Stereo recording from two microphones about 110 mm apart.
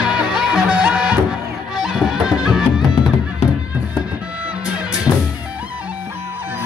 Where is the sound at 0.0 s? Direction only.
5° right (ahead or behind).